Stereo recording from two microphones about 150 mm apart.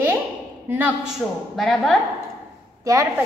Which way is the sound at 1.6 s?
Centre (ahead or behind).